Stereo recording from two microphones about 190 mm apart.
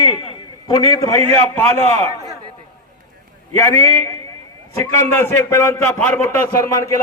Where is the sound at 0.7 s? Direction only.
15° left (ahead or behind).